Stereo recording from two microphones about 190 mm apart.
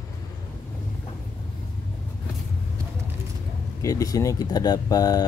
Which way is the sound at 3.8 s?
20° left (ahead or behind).